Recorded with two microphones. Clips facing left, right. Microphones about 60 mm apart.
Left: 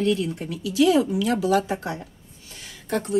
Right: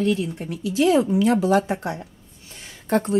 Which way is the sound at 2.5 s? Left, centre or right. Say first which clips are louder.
Right 5 dB; right.